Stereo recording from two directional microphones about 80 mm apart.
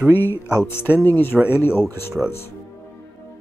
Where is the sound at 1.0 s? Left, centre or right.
Left.